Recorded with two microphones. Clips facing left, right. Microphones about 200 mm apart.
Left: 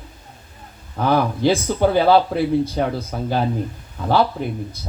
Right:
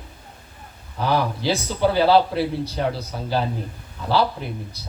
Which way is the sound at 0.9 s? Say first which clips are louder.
Left 3 dB; 50° left (ahead or behind).